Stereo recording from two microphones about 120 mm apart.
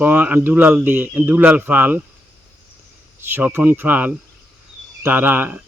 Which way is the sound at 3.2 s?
20° right (ahead or behind).